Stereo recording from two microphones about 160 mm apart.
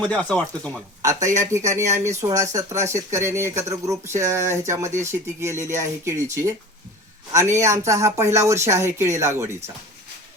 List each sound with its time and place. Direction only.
0.0 s speech: 5° left (ahead or behind)
1.5 s speech: 20° right (ahead or behind)